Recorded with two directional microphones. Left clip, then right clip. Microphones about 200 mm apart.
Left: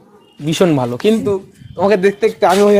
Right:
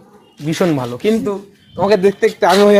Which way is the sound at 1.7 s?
20° left (ahead or behind).